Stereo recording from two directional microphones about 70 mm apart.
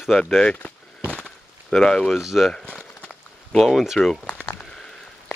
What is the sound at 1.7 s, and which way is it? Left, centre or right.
Speech, centre.